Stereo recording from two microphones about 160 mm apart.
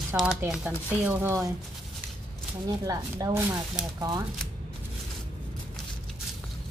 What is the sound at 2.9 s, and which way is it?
Speech, 20° right (ahead or behind).